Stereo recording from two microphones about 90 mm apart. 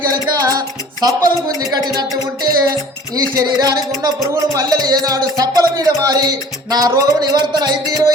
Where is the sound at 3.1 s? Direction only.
45° right (ahead or behind).